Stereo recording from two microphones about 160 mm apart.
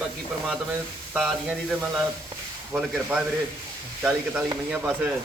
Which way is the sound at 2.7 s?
5° right (ahead or behind).